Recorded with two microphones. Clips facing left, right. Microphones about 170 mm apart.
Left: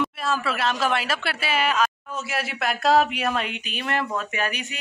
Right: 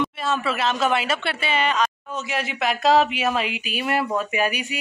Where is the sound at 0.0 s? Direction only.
Centre (ahead or behind).